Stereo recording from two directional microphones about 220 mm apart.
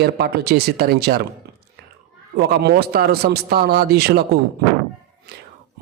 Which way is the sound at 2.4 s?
50° right (ahead or behind).